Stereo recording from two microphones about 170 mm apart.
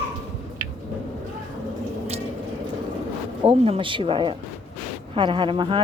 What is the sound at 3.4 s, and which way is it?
A woman's voice, 35° right (ahead or behind).